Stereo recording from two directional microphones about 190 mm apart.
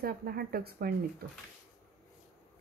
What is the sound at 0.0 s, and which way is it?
Speech, 55° right (ahead or behind).